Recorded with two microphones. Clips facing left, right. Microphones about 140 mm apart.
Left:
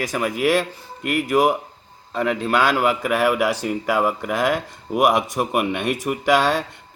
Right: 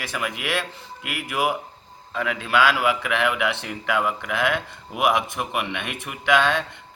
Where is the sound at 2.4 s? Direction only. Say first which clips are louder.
Left 1 dB; 45° left (ahead or behind).